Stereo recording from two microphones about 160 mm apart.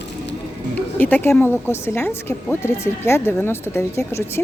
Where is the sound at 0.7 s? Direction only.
10° left (ahead or behind).